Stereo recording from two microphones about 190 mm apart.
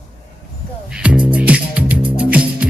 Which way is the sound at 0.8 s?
5° right (ahead or behind).